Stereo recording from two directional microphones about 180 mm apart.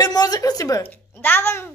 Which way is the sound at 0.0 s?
20° left (ahead or behind).